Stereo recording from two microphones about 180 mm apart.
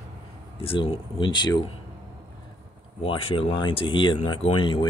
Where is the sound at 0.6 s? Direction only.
30° left (ahead or behind).